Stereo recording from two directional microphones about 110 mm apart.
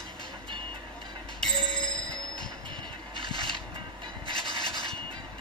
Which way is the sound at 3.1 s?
45° right (ahead or behind).